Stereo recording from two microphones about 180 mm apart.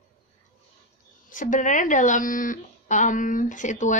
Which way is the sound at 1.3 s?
45° left (ahead or behind).